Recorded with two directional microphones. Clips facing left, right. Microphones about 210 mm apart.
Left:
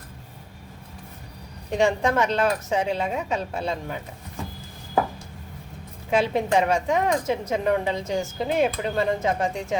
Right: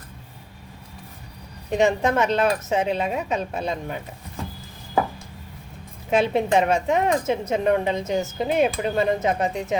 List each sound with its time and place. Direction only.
1.7 s speech: 20° right (ahead or behind)
6.1 s speech: 25° right (ahead or behind)